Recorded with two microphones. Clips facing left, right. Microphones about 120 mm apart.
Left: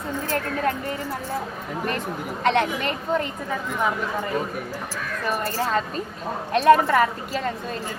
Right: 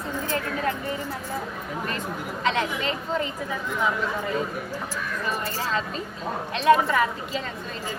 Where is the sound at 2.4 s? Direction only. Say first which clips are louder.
Left 4 dB; 55° left (ahead or behind).